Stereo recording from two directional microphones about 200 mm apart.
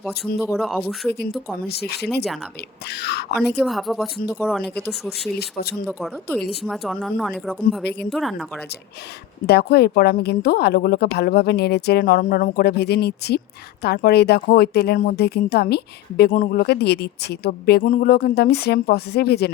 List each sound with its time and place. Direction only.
0.4 s speech: 5° right (ahead or behind)
1.6 s speech: 55° left (ahead or behind)
3.6 s speech: centre (ahead or behind)
5.4 s speech: 50° left (ahead or behind)
5.8 s speech: centre (ahead or behind)
9.5 s speech: 55° left (ahead or behind)